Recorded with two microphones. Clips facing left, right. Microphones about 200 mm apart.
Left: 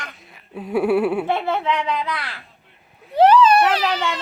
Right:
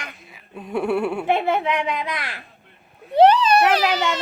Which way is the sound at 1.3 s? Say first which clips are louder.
Right 1 dB; 15° right (ahead or behind).